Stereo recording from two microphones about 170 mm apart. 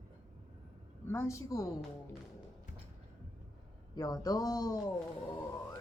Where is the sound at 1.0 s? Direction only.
15° left (ahead or behind).